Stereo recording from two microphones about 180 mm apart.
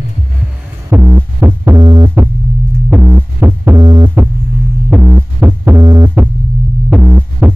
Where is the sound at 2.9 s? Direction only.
10° right (ahead or behind).